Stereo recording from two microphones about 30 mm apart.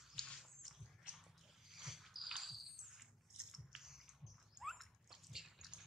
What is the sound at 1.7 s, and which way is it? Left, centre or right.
Rodents, centre.